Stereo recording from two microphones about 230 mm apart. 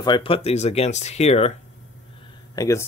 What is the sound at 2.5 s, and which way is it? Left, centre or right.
Speech, centre.